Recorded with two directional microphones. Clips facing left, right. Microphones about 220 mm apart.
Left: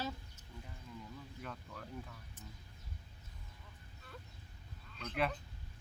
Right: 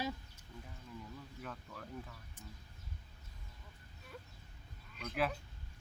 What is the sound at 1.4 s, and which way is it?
Speech, centre (ahead or behind).